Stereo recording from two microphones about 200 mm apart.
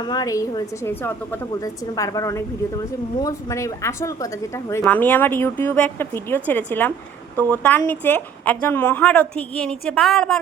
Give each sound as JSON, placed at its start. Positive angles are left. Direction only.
{"t": 0.1, "sound": "a woman's voice", "side_deg": 20}